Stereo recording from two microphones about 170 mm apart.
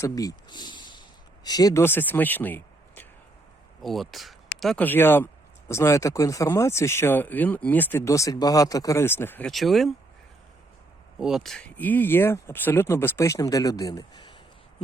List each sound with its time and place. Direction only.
0.0 s speech: 20° left (ahead or behind)
3.8 s speech: centre (ahead or behind)
9.5 s speech: centre (ahead or behind)
11.2 s speech: centre (ahead or behind); by 14.3 s 25° left (ahead or behind)